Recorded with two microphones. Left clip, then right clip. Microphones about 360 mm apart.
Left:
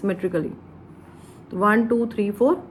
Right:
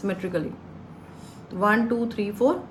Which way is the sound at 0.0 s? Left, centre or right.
Centre.